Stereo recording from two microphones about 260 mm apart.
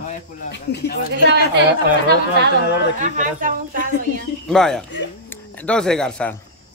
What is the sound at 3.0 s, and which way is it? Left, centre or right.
Speech, right.